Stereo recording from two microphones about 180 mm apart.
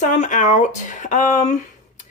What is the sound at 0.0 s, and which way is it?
Speech, 45° left (ahead or behind).